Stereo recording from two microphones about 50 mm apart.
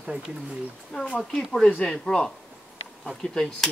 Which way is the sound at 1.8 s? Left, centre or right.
Centre.